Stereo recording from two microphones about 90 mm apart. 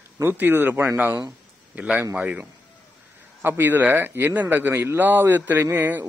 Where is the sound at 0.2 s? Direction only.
25° right (ahead or behind).